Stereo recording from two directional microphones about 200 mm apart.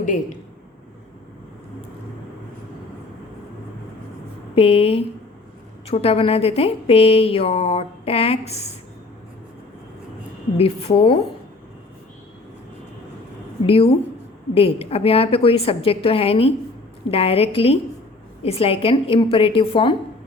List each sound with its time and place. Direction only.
0.0 s a man's voice: 40° left (ahead or behind)
4.5 s speech: 30° left (ahead or behind)
10.6 s speech: 30° left (ahead or behind)
13.7 s speech: 30° left (ahead or behind)